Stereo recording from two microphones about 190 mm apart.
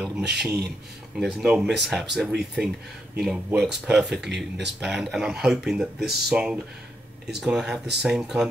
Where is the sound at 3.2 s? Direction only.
5° right (ahead or behind).